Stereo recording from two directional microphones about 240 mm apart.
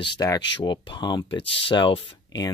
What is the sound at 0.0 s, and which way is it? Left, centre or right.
Speech, centre.